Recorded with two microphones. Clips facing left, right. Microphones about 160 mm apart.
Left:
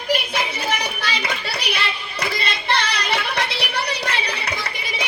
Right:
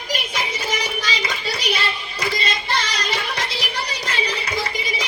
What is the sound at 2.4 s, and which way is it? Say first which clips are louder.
Music: left 1 dB; 60° left (ahead or behind).